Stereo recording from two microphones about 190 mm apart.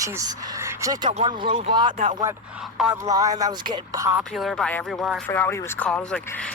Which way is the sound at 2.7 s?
5° right (ahead or behind).